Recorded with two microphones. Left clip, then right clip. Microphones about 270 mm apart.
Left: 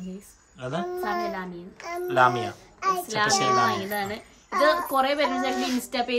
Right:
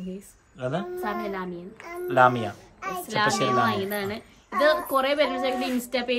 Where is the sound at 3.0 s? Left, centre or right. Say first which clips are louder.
Right 3 dB; centre.